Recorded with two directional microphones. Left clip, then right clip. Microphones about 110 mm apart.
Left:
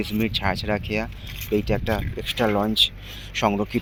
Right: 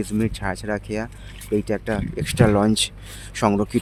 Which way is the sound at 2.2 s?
75° right (ahead or behind).